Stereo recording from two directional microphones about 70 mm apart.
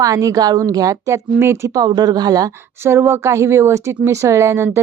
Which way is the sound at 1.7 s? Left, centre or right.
Right.